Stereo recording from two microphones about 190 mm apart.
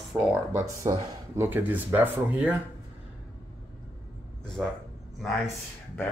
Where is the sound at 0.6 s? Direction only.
15° right (ahead or behind).